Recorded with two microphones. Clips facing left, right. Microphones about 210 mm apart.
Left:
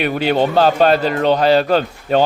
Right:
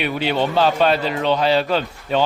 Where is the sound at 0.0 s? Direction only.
45° left (ahead or behind).